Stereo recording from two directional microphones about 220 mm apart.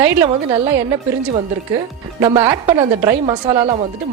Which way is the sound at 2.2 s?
15° right (ahead or behind).